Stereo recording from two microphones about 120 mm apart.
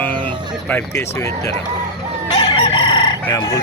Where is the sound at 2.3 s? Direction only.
35° left (ahead or behind).